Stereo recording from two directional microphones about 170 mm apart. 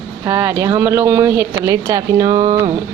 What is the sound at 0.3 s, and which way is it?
Speech, 15° right (ahead or behind).